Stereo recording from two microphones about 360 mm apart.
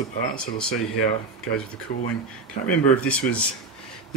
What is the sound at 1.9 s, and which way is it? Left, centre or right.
Speech, left.